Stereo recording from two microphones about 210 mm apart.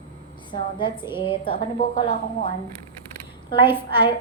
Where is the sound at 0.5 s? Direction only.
20° left (ahead or behind).